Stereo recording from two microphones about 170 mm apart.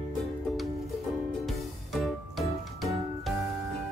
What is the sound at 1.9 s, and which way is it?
Music, centre (ahead or behind).